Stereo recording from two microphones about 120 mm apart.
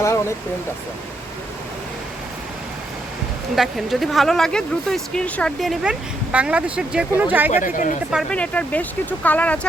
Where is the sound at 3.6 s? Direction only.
Centre (ahead or behind).